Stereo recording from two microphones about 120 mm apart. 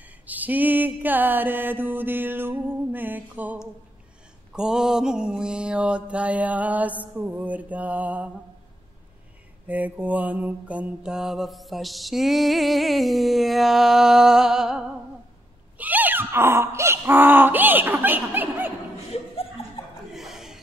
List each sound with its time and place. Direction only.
0.0 s mantra: 15° right (ahead or behind)
9.7 s mantra: 15° right (ahead or behind)
20.1 s a sound: centre (ahead or behind)